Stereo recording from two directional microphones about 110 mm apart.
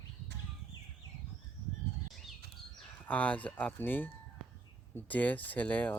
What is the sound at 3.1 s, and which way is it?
Speech, 15° left (ahead or behind).